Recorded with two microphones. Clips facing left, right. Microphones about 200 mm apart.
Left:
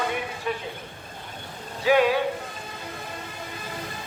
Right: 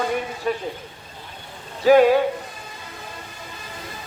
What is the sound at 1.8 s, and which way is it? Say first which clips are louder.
Speech: right 6 dB; 40° right (ahead or behind).